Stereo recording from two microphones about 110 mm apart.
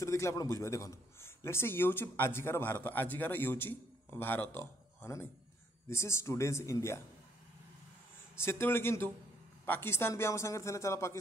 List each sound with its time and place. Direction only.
0.0 s a man's voice: 25° left (ahead or behind)
8.4 s a man's voice: 25° left (ahead or behind)